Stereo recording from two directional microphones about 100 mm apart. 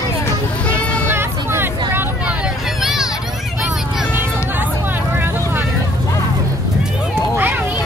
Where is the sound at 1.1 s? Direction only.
25° right (ahead or behind).